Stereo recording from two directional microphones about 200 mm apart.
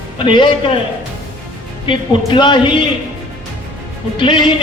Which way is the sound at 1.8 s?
25° left (ahead or behind).